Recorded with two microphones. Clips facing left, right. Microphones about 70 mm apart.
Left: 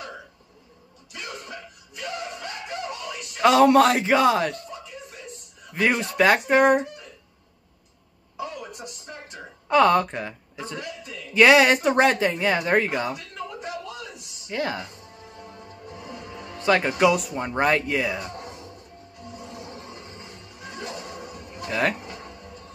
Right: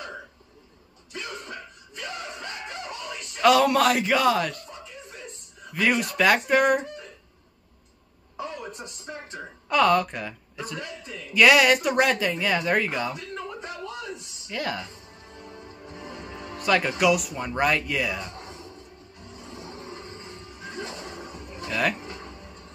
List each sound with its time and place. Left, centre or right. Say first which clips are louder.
3.4 s speech: left 3 dB; left
5.8 s speech: left 2 dB; left
8.8 s music: right 1 dB; right
9.7 s speech: left 3 dB; left
14.5 s speech: left 2 dB; left
16.5 s speech: left 2 dB; left
19.5 s music: even; right
21.6 s speech: left 2 dB; left